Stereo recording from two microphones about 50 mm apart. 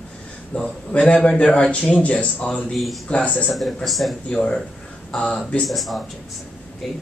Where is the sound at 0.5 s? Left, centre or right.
Left.